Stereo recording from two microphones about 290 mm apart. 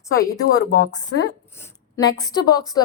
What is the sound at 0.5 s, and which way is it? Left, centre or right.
Speech, left.